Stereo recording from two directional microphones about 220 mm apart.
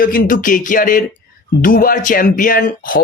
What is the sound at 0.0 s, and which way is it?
Speech, 40° left (ahead or behind).